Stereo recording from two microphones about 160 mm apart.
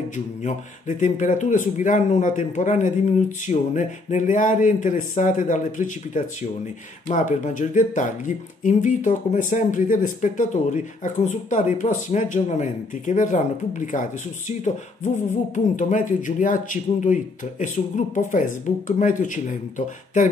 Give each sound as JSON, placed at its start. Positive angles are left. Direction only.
{"t": 0.1, "sound": "speech", "side_deg": 50}
{"t": 15.5, "sound": "speech", "side_deg": 55}